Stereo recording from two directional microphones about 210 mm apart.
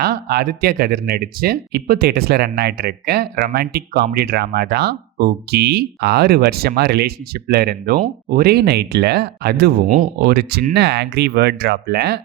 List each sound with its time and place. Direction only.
0.0 s speech: 50° right (ahead or behind)